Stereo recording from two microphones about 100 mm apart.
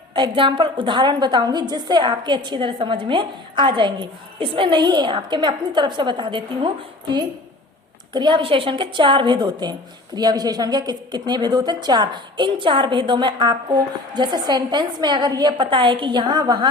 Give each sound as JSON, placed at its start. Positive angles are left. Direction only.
{"t": 0.1, "sound": "a woman's voice", "side_deg": -55}
{"t": 8.1, "sound": "a woman's voice", "side_deg": -50}